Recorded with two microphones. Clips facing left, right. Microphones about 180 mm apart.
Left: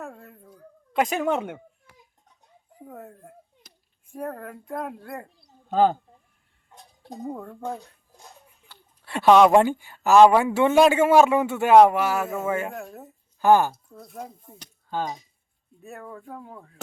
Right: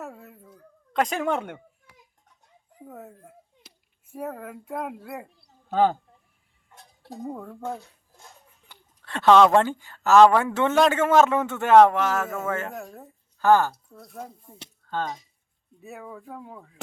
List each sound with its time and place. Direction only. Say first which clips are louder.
0.0 s speech: even; 5° right (ahead or behind)
2.8 s a woman's voice: left 1 dB; centre (ahead or behind)
7.3 s speech: left 1 dB; centre (ahead or behind)
9.0 s a woman's voice: left 1 dB; 15° left (ahead or behind)
13.4 s a woman's voice: left 1 dB; 15° left (ahead or behind)
13.9 s speech: left 1 dB; 5° left (ahead or behind)
15.8 s speech: even; 5° right (ahead or behind)